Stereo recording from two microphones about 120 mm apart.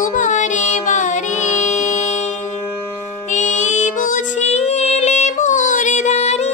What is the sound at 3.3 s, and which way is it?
Music, 90° left.